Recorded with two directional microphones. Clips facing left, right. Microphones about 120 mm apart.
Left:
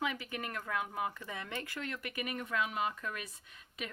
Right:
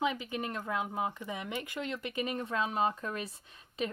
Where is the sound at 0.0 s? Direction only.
20° right (ahead or behind).